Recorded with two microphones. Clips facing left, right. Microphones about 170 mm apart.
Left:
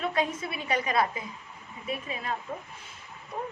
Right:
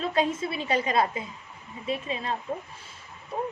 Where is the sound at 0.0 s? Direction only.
30° right (ahead or behind).